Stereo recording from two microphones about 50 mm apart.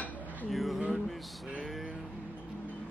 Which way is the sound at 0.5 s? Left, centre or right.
Centre.